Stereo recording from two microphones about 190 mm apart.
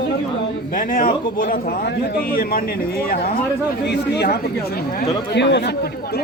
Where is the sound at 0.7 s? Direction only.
45° left (ahead or behind).